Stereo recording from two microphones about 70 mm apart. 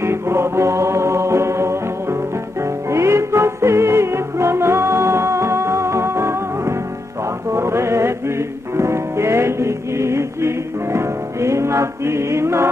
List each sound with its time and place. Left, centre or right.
0.0 s music: right
2.9 s music: right